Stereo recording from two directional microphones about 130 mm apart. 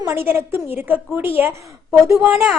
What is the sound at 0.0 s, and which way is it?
A woman's voice, 20° right (ahead or behind).